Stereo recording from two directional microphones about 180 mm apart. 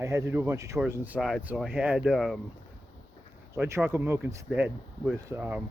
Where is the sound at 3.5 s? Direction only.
15° right (ahead or behind).